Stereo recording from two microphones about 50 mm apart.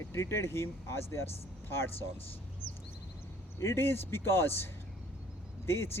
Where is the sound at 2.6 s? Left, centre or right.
Right.